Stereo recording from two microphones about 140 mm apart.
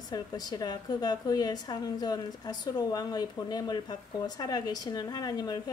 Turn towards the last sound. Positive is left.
turn(degrees=30)  # may be behind; listen again after turning